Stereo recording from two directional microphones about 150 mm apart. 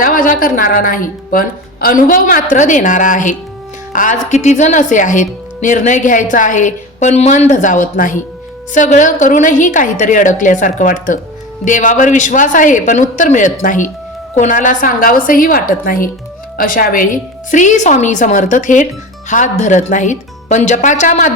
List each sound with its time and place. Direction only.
0.0 s a woman's voice: 70° left (ahead or behind)